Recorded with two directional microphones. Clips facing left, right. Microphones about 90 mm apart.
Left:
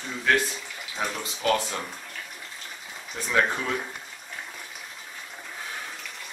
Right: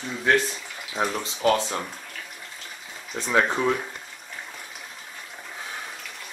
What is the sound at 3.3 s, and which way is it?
Speech, 25° right (ahead or behind).